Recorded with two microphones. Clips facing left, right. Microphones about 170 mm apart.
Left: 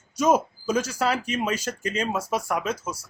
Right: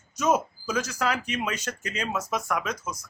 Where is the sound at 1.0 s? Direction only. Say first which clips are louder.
Left 3 dB; 30° left (ahead or behind).